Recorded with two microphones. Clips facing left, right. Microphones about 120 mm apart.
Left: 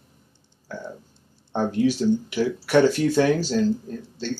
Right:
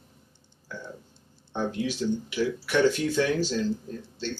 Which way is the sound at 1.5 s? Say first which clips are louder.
Left 7 dB; 45° left (ahead or behind).